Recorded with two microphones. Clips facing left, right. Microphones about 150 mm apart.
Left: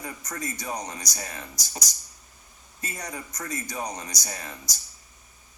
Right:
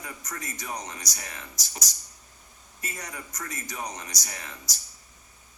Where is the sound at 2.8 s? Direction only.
35° left (ahead or behind).